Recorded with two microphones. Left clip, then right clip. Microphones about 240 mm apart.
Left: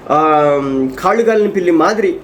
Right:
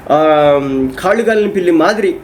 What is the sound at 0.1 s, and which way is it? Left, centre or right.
A man's voice, centre.